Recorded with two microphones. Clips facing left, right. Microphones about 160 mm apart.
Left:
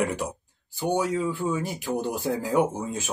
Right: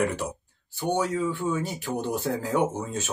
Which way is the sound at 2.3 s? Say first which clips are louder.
Left 2 dB; 15° left (ahead or behind).